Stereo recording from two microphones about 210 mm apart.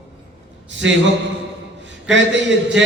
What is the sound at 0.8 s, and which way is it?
Speech, 65° right (ahead or behind).